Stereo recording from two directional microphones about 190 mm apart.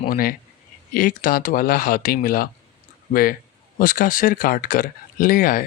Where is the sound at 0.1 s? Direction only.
50° left (ahead or behind).